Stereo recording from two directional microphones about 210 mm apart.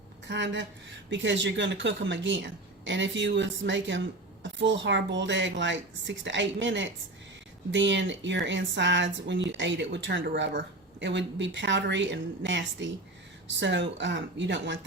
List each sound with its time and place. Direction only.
0.3 s speech: 60° right (ahead or behind)